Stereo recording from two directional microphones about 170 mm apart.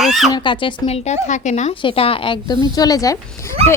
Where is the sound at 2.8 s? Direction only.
20° left (ahead or behind).